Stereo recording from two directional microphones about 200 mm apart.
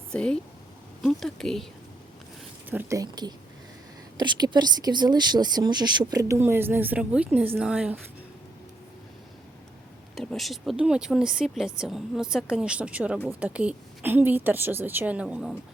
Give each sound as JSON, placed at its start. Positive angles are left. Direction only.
{"t": 0.1, "sound": "speech", "side_deg": 5}
{"t": 2.6, "sound": "speech", "side_deg": -10}
{"t": 10.2, "sound": "speech", "side_deg": 0}